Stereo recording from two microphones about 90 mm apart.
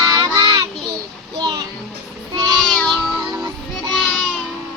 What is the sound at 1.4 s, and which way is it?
Music, 40° right (ahead or behind).